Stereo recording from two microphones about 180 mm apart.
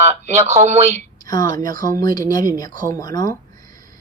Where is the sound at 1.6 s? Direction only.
50° right (ahead or behind).